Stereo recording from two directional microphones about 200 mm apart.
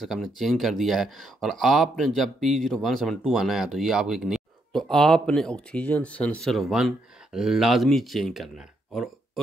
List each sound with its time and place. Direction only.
0.0 s speech: centre (ahead or behind)